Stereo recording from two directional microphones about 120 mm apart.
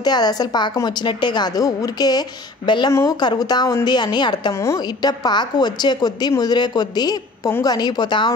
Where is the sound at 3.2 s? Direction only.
35° left (ahead or behind).